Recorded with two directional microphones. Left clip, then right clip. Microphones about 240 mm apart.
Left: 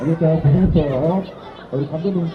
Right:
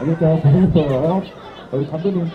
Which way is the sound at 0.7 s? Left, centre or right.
Centre.